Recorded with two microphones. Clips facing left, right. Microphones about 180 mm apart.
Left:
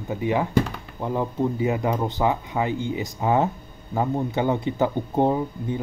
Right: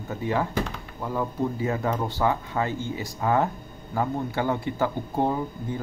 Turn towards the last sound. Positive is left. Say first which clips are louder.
# left 4 dB
turn(degrees=20)  # may be behind; listen again after turning